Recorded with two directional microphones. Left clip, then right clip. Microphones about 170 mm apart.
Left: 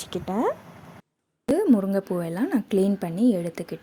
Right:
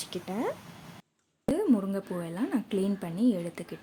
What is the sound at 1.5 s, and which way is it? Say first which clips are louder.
A woman's voice: left 7 dB; 30° left (ahead or behind).